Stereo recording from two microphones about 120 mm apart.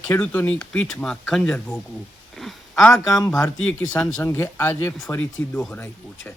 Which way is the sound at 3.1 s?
30° left (ahead or behind).